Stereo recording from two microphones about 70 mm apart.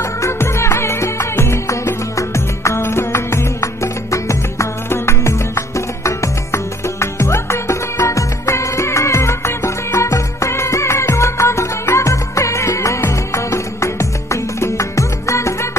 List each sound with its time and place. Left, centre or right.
0.0 s music: left